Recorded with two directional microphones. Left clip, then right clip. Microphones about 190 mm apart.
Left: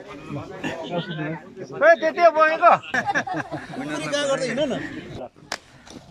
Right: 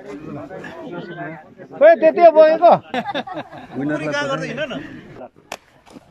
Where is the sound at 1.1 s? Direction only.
35° right (ahead or behind).